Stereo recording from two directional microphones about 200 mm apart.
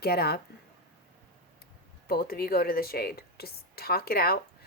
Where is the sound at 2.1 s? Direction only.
50° left (ahead or behind).